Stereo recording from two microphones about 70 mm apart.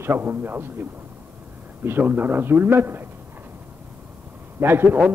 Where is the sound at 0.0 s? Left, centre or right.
Right.